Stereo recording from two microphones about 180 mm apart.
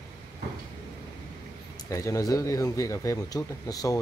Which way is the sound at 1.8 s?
15° left (ahead or behind).